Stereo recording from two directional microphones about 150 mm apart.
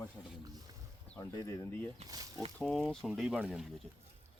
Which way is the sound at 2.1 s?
25° right (ahead or behind).